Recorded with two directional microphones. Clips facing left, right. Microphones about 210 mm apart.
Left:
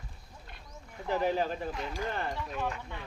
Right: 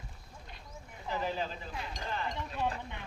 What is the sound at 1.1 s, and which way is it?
Speech, 55° left (ahead or behind).